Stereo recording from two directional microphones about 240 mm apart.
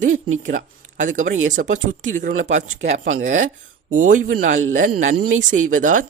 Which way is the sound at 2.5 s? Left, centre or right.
Right.